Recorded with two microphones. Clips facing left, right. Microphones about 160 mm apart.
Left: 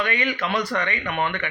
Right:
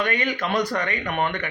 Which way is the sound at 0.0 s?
45° right (ahead or behind).